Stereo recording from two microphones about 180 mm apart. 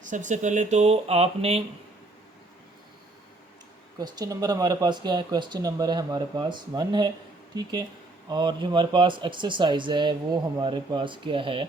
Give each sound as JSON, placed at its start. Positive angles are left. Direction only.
{"t": 0.0, "sound": "speech", "side_deg": -45}
{"t": 3.9, "sound": "speech", "side_deg": -20}